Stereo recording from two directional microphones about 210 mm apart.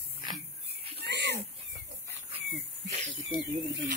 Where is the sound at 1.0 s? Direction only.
55° right (ahead or behind).